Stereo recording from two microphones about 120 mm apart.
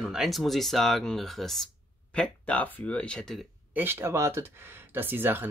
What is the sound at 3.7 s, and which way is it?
Speech, 20° right (ahead or behind).